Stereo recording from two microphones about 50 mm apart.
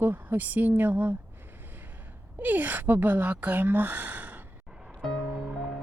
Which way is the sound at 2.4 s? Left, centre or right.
Right.